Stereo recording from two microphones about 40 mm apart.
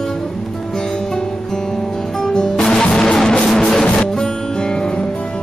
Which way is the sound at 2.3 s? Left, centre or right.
Centre.